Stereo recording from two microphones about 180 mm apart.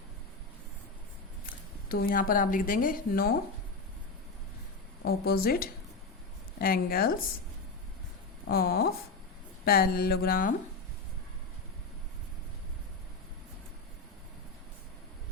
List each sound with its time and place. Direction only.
1.5 s speech: 55° left (ahead or behind)
5.0 s speech: 60° left (ahead or behind)
8.4 s speech: 60° left (ahead or behind)